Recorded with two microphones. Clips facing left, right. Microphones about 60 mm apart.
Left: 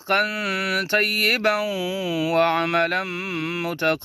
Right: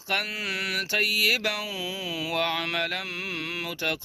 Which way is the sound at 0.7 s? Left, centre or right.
Left.